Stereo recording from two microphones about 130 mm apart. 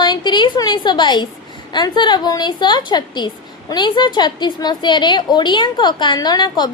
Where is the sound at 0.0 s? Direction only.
35° left (ahead or behind).